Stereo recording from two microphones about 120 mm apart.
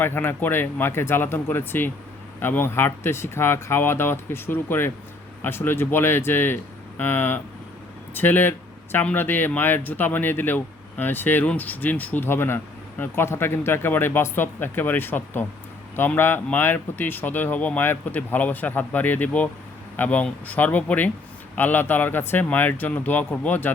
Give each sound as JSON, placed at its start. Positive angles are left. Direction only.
{"t": 0.0, "sound": "speech", "side_deg": 20}